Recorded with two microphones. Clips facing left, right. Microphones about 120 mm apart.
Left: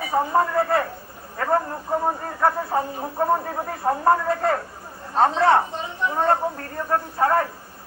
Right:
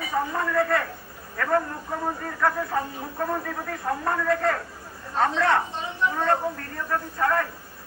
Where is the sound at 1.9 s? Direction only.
30° left (ahead or behind).